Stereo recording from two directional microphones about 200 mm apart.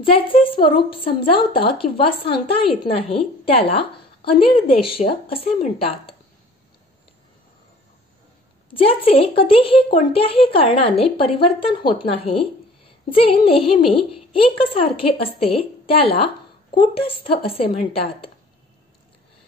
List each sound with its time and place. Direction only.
0.1 s a child's voice: 25° left (ahead or behind)
8.7 s a child's voice: 25° left (ahead or behind)